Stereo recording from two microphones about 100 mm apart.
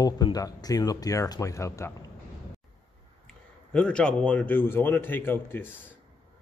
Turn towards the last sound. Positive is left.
turn(degrees=20)  # may be behind; listen again after turning